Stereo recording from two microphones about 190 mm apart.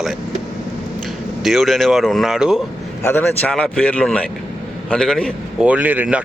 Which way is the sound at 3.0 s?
10° left (ahead or behind).